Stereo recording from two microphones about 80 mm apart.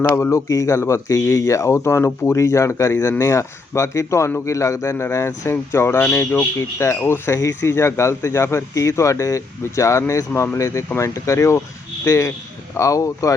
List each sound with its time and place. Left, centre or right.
0.2 s speech: left
6.1 s speech: left
6.6 s speech: left